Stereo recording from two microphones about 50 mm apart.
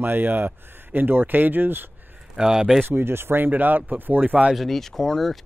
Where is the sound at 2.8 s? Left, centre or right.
Right.